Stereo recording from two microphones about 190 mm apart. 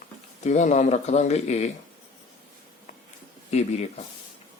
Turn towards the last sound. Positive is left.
turn(degrees=35)  # may be behind; listen again after turning